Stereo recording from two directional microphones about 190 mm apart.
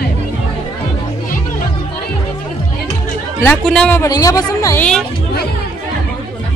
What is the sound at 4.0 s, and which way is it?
Speech, 20° left (ahead or behind).